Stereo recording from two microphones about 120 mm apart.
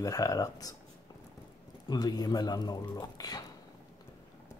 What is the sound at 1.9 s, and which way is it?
Speech, 35° left (ahead or behind).